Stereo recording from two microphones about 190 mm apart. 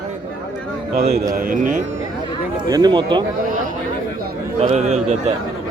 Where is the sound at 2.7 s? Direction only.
20° right (ahead or behind).